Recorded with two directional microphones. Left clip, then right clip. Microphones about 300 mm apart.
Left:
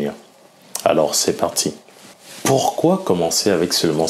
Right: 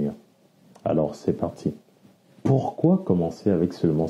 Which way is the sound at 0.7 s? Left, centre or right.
Centre.